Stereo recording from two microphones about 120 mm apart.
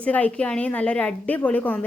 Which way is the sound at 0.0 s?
10° left (ahead or behind).